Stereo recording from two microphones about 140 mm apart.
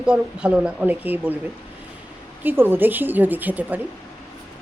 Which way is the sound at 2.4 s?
15° right (ahead or behind).